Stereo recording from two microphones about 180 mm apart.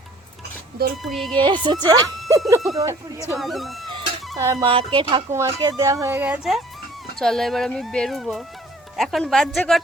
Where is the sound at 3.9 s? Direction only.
20° right (ahead or behind).